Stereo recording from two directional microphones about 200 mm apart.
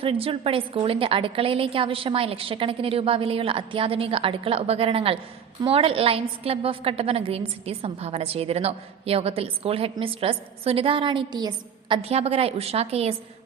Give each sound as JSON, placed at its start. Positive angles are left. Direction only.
{"t": 0.0, "sound": "a woman's voice", "side_deg": -30}